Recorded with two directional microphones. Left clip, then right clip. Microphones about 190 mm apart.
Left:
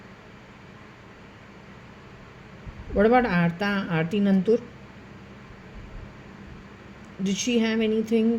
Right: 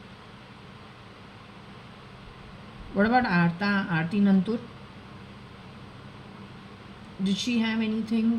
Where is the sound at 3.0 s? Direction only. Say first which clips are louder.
Left 3 dB; 25° left (ahead or behind).